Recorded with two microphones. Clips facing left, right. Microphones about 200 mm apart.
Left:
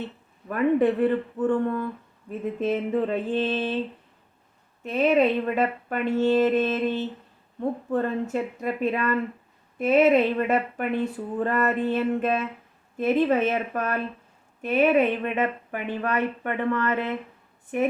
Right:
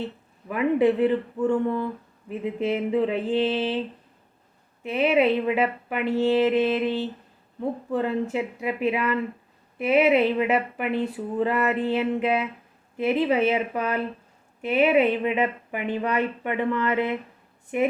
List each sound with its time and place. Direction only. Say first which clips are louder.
0.4 s speech: even; 10° right (ahead or behind)
4.8 s speech: even; 10° right (ahead or behind)